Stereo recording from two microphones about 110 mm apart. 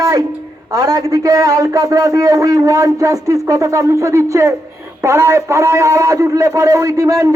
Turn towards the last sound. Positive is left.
turn(degrees=-30)  # may be behind; listen again after turning